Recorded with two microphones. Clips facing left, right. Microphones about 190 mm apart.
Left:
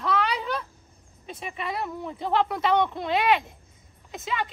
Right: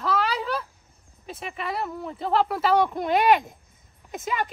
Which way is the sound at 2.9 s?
45° right (ahead or behind).